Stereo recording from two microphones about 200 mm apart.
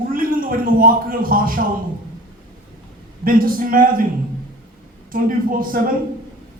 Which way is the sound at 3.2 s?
45° right (ahead or behind).